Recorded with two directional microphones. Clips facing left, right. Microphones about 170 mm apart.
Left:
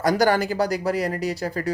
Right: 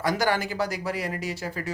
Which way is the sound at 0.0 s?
40° left (ahead or behind).